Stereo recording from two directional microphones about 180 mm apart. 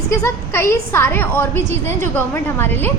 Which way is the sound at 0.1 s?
15° left (ahead or behind).